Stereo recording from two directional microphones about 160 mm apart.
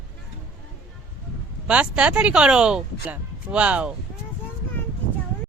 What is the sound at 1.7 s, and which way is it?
Speech, 5° right (ahead or behind).